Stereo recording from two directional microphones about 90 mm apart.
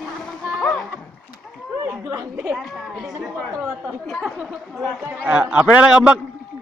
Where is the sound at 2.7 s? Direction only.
Centre (ahead or behind).